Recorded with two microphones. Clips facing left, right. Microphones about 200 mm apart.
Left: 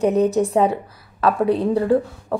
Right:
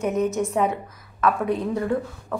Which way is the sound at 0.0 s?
35° left (ahead or behind).